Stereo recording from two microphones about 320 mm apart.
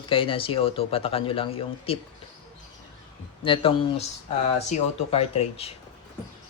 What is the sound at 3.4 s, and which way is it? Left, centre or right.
Speech, centre.